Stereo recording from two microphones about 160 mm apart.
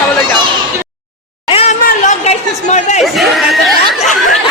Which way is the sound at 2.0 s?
50° left (ahead or behind).